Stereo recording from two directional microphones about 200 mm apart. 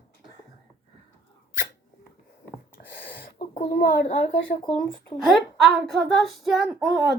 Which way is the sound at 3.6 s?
50° left (ahead or behind).